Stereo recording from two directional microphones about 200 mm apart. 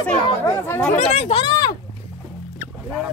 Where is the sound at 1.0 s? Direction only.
30° left (ahead or behind).